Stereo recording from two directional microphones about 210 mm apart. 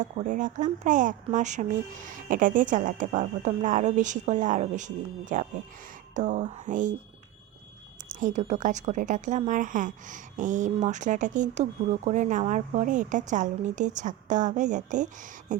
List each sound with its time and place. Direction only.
0.0 s a woman's voice: 35° right (ahead or behind)
8.1 s a woman's voice: 35° right (ahead or behind)